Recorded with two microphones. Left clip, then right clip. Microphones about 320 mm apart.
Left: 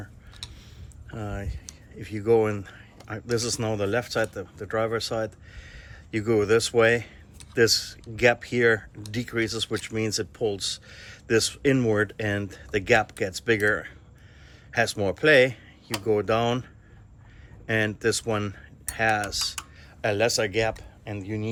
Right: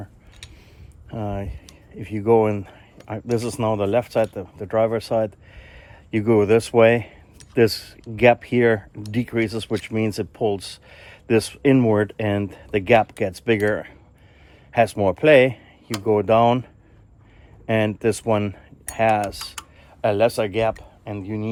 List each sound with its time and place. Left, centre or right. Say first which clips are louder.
1.1 s speech: right 7 dB; centre
17.7 s speech: right 4 dB; centre